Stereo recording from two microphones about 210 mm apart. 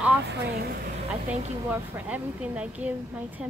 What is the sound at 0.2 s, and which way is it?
Speech, 55° right (ahead or behind).